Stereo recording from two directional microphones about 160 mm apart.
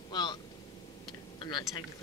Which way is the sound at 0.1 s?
25° left (ahead or behind).